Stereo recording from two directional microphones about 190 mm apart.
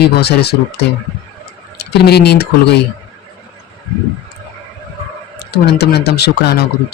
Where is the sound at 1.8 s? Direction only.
60° left (ahead or behind).